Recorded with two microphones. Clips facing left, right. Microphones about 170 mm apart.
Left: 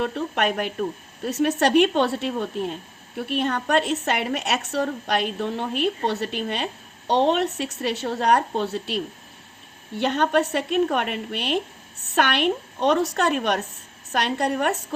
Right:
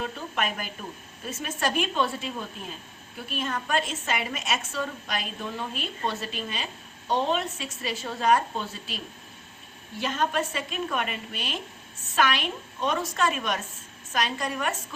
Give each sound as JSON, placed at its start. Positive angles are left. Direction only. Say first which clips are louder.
{"t": 0.0, "sound": "a woman's voice", "louder": "left 7 dB", "side_deg": 70}
{"t": 10.0, "sound": "a woman's voice", "louder": "left 6 dB", "side_deg": 65}